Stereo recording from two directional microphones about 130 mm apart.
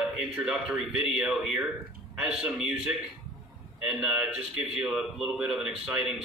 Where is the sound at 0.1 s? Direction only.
5° right (ahead or behind).